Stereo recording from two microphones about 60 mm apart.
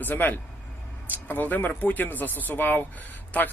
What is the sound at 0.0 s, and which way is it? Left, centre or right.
Speech, left.